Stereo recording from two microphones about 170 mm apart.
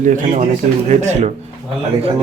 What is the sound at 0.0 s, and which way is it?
Speech, 45° right (ahead or behind).